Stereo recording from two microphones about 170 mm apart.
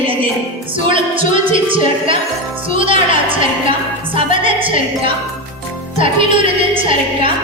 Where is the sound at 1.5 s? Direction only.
30° right (ahead or behind).